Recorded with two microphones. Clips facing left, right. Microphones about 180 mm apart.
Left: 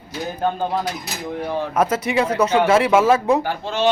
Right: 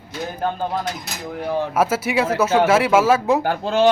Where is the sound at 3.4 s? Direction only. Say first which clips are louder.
Right 4 dB; 55° right (ahead or behind).